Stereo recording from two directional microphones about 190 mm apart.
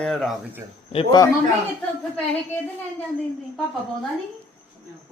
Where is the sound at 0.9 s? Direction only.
20° left (ahead or behind).